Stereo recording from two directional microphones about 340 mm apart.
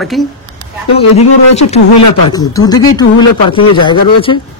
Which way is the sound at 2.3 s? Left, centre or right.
Centre.